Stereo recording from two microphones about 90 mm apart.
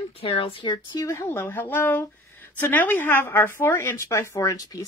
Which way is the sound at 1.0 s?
25° left (ahead or behind).